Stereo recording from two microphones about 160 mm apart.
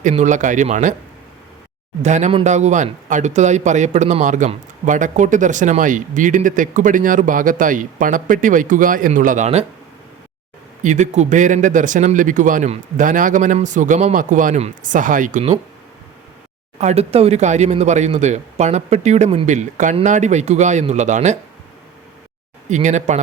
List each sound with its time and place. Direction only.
0.0 s a man's voice: 50° right (ahead or behind)
2.0 s a man's voice: 45° right (ahead or behind)
10.8 s a man's voice: 50° right (ahead or behind)
16.7 s a man's voice: 45° right (ahead or behind)
22.7 s a man's voice: 45° right (ahead or behind)